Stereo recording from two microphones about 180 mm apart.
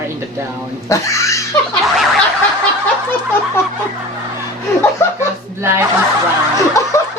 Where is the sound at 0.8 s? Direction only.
15° left (ahead or behind).